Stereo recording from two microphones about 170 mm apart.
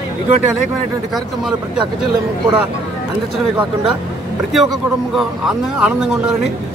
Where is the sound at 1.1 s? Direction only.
5° right (ahead or behind).